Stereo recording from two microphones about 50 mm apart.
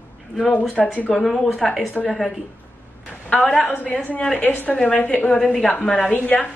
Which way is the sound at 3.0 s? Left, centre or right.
Left.